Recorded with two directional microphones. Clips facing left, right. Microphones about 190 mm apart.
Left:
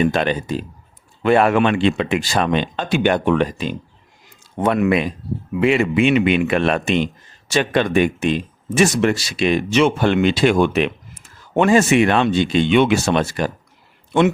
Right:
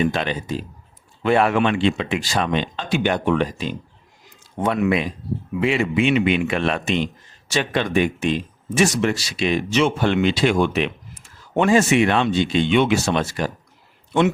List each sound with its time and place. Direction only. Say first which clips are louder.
0.0 s speech: left 4 dB; 50° left (ahead or behind)